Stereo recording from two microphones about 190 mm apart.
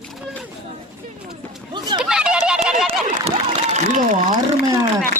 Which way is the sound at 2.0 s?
5° right (ahead or behind).